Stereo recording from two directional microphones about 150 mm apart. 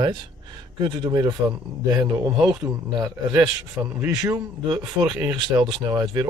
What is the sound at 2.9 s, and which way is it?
Speech, 25° right (ahead or behind).